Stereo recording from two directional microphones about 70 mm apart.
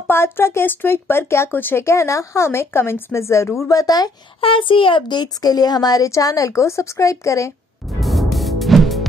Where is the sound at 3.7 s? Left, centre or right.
Left.